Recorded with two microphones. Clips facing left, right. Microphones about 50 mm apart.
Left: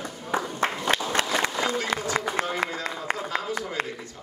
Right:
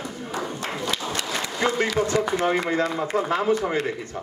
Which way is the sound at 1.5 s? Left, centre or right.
Right.